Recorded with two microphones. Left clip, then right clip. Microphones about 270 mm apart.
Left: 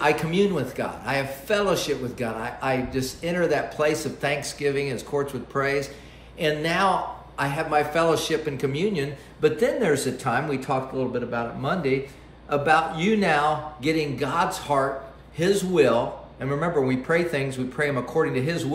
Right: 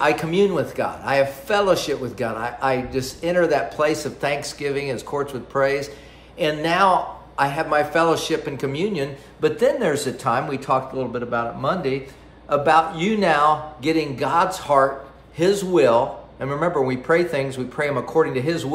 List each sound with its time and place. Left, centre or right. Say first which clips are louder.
0.0 s a man's voice: right 3 dB; centre